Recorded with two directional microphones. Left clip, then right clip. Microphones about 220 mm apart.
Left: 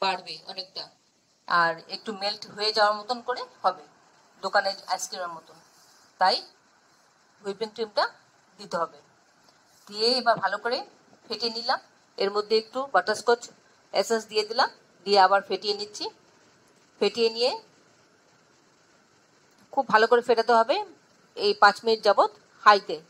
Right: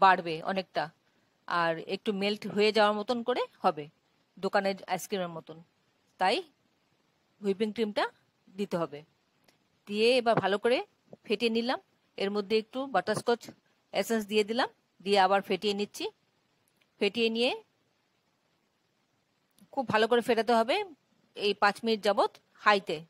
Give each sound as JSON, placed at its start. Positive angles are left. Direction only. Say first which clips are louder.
{"t": 0.1, "sound": "a woman's voice", "louder": "right 5 dB", "side_deg": -45}
{"t": 1.5, "sound": "a woman's voice", "louder": "left 6 dB", "side_deg": -45}
{"t": 6.1, "sound": "speech", "louder": "left 5 dB", "side_deg": -45}
{"t": 7.4, "sound": "a woman's voice", "louder": "right 1 dB", "side_deg": -45}
{"t": 17.0, "sound": "a woman's voice", "louder": "left 4 dB", "side_deg": -40}
{"t": 19.7, "sound": "a woman's voice", "louder": "left 6 dB", "side_deg": -45}